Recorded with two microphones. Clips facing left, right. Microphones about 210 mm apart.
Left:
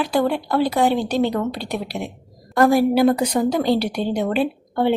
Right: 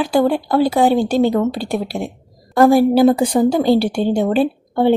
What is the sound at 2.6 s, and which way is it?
A woman's voice, 30° right (ahead or behind).